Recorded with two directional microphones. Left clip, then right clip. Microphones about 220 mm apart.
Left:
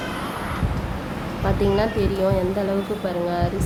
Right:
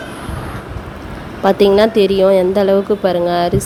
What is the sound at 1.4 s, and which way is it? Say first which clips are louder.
A woman's voice: right 11 dB; 40° right (ahead or behind).